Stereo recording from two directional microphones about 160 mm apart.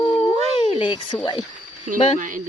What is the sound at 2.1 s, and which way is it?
Speech, 55° right (ahead or behind).